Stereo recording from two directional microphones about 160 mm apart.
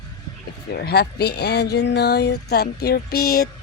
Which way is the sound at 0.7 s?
85° left.